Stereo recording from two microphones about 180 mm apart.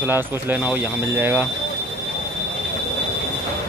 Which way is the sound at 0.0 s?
10° right (ahead or behind).